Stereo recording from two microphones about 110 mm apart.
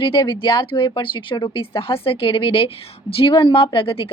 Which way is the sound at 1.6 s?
55° left (ahead or behind).